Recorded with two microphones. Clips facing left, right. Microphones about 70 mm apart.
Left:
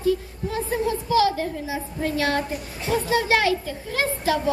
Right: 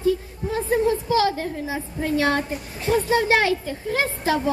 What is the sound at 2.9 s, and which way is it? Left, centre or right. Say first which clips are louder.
A woman's voice: right 2 dB; right.